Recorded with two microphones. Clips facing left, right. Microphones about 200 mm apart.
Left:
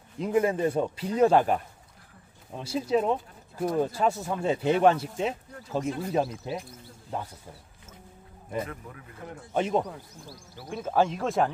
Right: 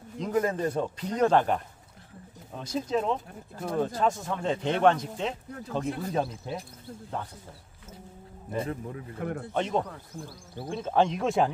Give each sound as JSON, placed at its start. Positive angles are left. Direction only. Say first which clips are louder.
{"t": 0.2, "sound": "speech", "louder": "left 3 dB", "side_deg": 10}
{"t": 2.6, "sound": "speech", "louder": "left 3 dB", "side_deg": 10}
{"t": 8.5, "sound": "a man's voice", "louder": "right 2 dB", "side_deg": -30}
{"t": 9.2, "sound": "speech", "louder": "right 9 dB", "side_deg": -60}
{"t": 9.5, "sound": "speech", "louder": "left 4 dB", "side_deg": 5}